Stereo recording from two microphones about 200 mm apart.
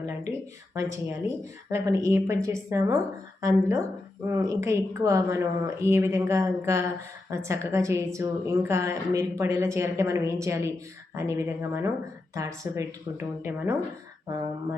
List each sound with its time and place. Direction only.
0.0 s a woman's voice: 15° right (ahead or behind)